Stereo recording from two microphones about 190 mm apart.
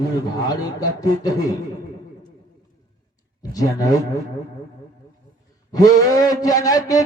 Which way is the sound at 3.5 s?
20° left (ahead or behind).